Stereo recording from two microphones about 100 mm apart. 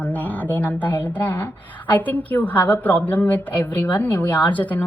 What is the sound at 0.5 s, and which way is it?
A woman's voice, 15° left (ahead or behind).